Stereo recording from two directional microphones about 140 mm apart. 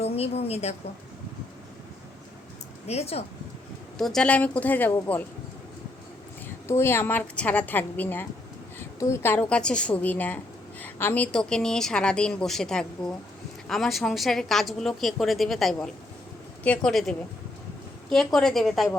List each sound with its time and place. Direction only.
0.0 s a woman's voice: 45° left (ahead or behind)
2.8 s speech: 50° left (ahead or behind)
3.9 s a woman's voice: 5° left (ahead or behind)
6.7 s a woman's voice: 15° left (ahead or behind); by 18.9 s centre (ahead or behind)